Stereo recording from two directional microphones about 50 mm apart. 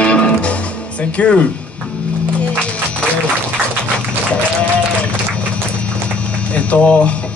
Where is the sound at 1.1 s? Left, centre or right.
Left.